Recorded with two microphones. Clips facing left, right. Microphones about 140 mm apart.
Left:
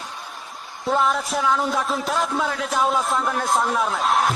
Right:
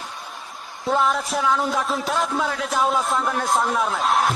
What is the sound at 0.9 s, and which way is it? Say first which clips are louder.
A man's voice: even; centre (ahead or behind).